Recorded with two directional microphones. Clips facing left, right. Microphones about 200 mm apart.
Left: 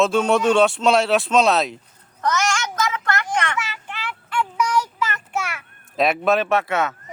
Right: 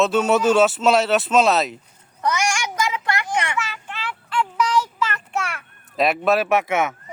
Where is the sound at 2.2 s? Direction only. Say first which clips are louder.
Even; 10° right (ahead or behind).